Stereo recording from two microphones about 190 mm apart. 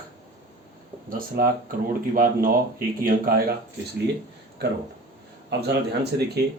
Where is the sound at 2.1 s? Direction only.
50° right (ahead or behind).